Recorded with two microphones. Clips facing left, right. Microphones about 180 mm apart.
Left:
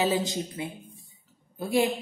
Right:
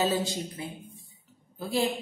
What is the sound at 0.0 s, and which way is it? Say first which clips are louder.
A woman's voice: left 1 dB; 15° left (ahead or behind).